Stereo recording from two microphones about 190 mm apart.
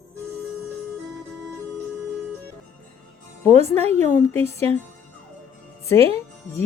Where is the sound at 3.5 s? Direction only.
35° right (ahead or behind).